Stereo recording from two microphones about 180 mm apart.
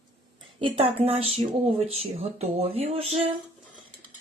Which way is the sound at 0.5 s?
30° right (ahead or behind).